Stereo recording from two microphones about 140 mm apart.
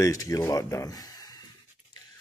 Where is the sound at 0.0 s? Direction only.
25° left (ahead or behind).